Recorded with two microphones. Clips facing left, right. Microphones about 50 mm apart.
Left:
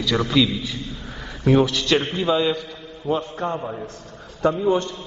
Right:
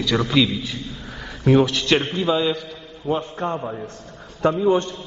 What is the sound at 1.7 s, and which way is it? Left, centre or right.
Speech, right.